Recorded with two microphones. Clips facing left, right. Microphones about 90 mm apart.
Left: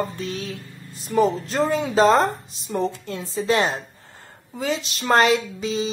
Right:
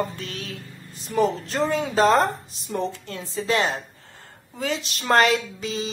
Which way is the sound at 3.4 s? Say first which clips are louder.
Left 2 dB; 20° left (ahead or behind).